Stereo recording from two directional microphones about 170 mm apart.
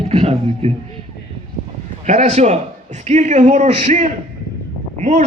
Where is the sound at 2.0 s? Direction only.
40° right (ahead or behind).